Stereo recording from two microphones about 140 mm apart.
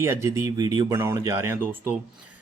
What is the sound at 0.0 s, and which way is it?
Speech, 20° right (ahead or behind).